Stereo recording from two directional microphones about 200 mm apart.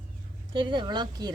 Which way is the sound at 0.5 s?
25° right (ahead or behind).